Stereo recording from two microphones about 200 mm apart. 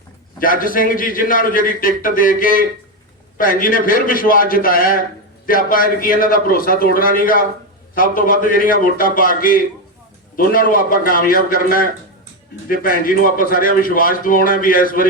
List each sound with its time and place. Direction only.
0.3 s a man's voice: 45° left (ahead or behind)